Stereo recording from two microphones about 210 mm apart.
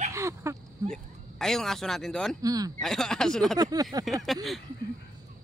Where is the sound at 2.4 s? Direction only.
15° right (ahead or behind).